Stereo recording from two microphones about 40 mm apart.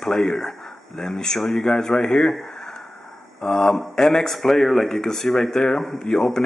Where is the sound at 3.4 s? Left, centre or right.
Centre.